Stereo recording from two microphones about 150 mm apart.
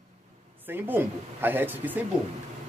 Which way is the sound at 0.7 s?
15° right (ahead or behind).